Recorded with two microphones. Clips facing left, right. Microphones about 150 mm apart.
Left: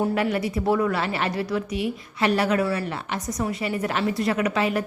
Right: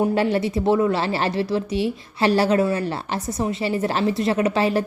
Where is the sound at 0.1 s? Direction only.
30° right (ahead or behind).